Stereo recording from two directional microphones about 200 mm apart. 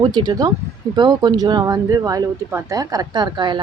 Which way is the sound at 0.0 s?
20° right (ahead or behind).